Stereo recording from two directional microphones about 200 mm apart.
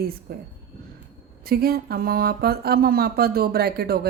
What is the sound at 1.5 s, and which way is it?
Speech, 50° right (ahead or behind).